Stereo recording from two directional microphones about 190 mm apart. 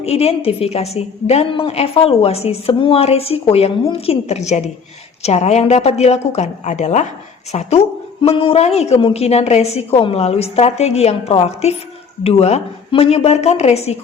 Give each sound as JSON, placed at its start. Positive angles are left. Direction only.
{"t": 0.0, "sound": "a woman's voice", "side_deg": 35}